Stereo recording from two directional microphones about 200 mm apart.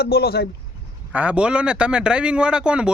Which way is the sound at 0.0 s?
50° left (ahead or behind).